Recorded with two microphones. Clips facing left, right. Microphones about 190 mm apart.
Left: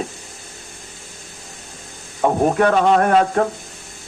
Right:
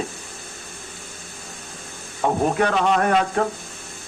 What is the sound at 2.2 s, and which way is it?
Speech, 50° left (ahead or behind).